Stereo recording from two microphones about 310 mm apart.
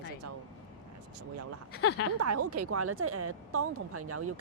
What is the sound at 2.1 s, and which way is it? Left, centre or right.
Speech, right.